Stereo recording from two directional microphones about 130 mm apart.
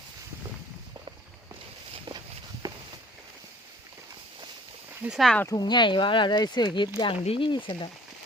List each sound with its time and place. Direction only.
2.1 s walk: 40° right (ahead or behind)
2.6 s walk: 30° right (ahead or behind)
5.0 s speech: centre (ahead or behind)
5.5 s speech: 30° left (ahead or behind)